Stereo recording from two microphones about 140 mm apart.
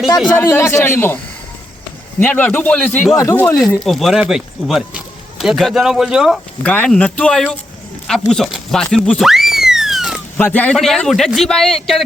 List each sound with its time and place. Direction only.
0.3 s a man's voice: 20° left (ahead or behind)
2.2 s a man's voice: 10° left (ahead or behind)
3.2 s speech: 20° left (ahead or behind)
3.4 s speech: 5° left (ahead or behind)
6.6 s a man's voice: 10° left (ahead or behind)
8.0 s a sound: 5° left (ahead or behind)
10.3 s a man's voice: 10° left (ahead or behind)